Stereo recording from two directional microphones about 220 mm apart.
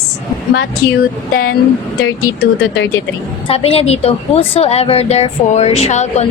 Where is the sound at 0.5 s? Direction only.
45° left (ahead or behind).